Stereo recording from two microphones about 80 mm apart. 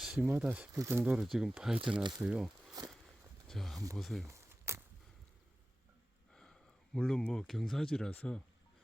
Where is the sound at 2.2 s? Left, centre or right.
Centre.